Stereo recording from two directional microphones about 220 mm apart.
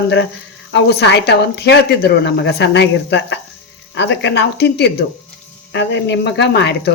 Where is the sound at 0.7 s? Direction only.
50° left (ahead or behind).